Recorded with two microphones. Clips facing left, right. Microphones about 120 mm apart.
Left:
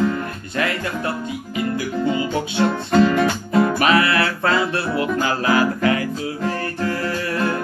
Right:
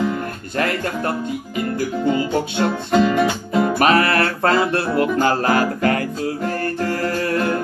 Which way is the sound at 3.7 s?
45° right (ahead or behind).